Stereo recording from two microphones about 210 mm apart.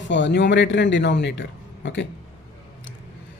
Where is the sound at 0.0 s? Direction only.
60° left (ahead or behind).